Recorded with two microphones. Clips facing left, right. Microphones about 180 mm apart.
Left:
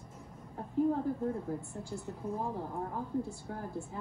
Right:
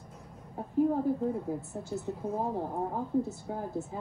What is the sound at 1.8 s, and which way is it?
A woman's voice, 20° right (ahead or behind).